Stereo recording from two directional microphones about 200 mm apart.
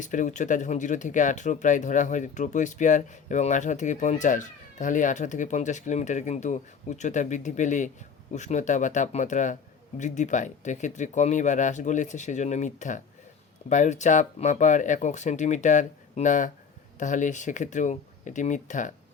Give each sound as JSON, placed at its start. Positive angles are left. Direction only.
{"t": 0.0, "sound": "speech", "side_deg": 40}